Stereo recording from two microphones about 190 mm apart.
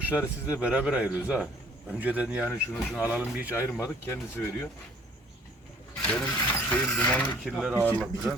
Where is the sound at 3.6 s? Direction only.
10° left (ahead or behind).